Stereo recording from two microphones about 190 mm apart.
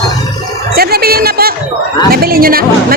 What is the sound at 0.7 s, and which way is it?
Speech, 55° right (ahead or behind).